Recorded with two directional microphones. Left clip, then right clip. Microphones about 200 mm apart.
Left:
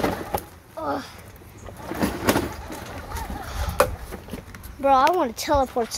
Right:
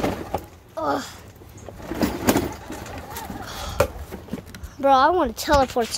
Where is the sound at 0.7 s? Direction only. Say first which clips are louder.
Right 4 dB; 30° right (ahead or behind).